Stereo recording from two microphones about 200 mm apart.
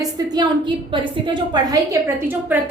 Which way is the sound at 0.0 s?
20° right (ahead or behind).